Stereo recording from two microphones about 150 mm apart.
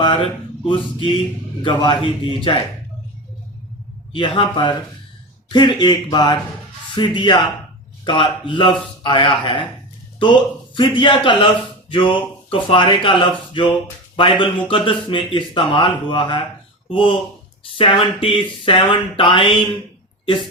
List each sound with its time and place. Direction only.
0.0 s a sound: 35° left (ahead or behind)
1.6 s speech: 35° left (ahead or behind)
4.1 s speech: 35° left (ahead or behind)